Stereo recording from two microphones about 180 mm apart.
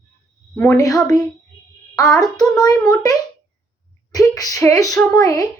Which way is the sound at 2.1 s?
20° left (ahead or behind).